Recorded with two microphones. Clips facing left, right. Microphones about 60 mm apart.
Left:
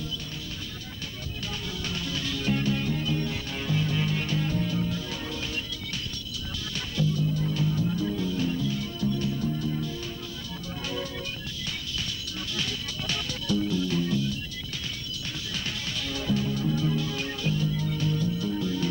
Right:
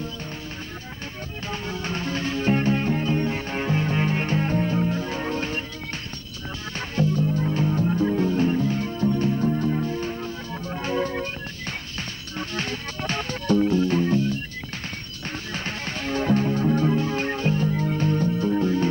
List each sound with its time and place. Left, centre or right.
1.5 s music: right
7.0 s music: right
12.4 s music: right
15.5 s music: right